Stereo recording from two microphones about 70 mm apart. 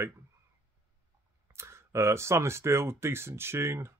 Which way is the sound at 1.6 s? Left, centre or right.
Right.